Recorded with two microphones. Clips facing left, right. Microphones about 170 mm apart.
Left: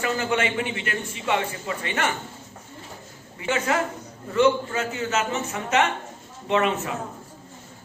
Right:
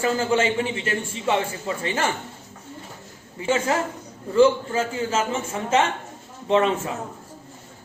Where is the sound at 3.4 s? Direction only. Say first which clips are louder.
Right 2 dB; 30° right (ahead or behind).